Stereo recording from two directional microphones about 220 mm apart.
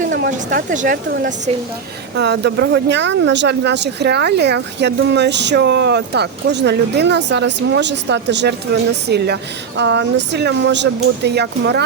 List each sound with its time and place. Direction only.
0.0 s speech: 40° right (ahead or behind)
2.1 s speech: 50° right (ahead or behind)